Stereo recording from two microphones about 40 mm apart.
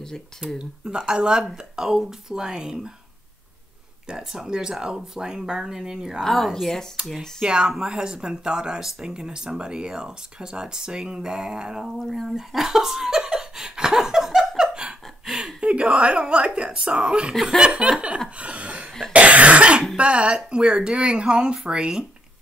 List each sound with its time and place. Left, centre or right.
0.6 s speech: centre
4.2 s speech: centre
6.2 s a woman's voice: centre
7.4 s speech: right
12.0 s a woman's voice: centre
12.4 s laughter: centre
14.6 s a sound: right
15.6 s speech: right
18.4 s a sound: right
19.1 s cough: right
20.0 s speech: right